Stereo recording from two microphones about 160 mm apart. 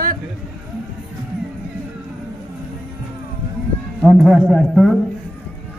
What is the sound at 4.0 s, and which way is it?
Speech, centre (ahead or behind).